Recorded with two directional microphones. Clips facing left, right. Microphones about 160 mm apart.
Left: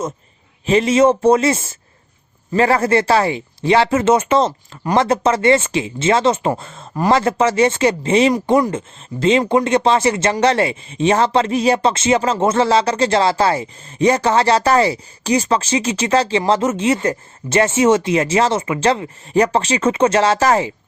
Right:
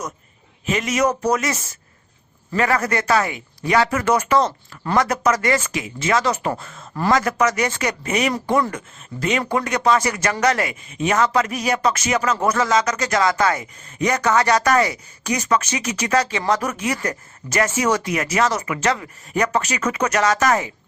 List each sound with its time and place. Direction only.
0.6 s speech: 30° left (ahead or behind)